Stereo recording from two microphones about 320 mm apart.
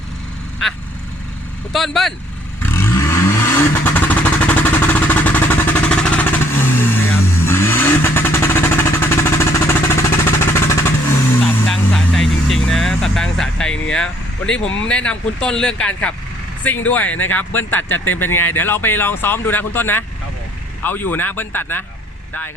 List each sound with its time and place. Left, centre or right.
0.6 s speech: centre
2.6 s vehicle: centre
14.8 s speech: centre
17.1 s speech: left
17.3 s speech: centre